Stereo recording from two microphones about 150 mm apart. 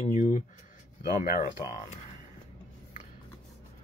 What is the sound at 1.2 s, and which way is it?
Speech, 65° left (ahead or behind).